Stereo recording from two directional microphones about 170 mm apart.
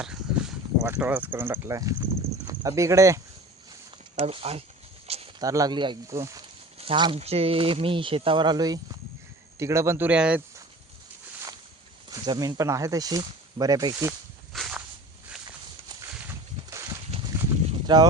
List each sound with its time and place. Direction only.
0.0 s a sound: 5° right (ahead or behind)
0.9 s speech: 10° right (ahead or behind)
4.1 s speech: 35° right (ahead or behind)
5.0 s a sound: 35° right (ahead or behind)
5.4 s speech: 20° right (ahead or behind)
6.7 s speech: 30° right (ahead or behind); by 10.4 s 5° right (ahead or behind)
12.1 s speech: 25° right (ahead or behind)
14.5 s walk: centre (ahead or behind)
15.4 s horse: 25° right (ahead or behind)
16.2 s a sound: 20° right (ahead or behind)